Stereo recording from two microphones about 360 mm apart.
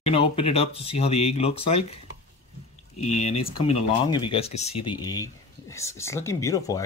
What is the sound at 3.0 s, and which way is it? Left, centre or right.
Speech, centre.